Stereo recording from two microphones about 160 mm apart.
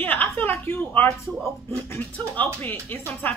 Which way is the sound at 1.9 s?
10° left (ahead or behind).